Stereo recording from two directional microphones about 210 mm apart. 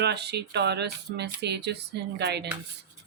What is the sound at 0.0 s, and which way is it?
Speech, 55° right (ahead or behind).